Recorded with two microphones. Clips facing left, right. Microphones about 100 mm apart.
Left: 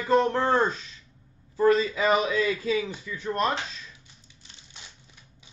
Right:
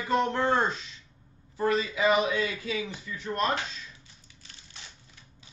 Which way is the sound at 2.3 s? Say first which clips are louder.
Left 5 dB; 35° left (ahead or behind).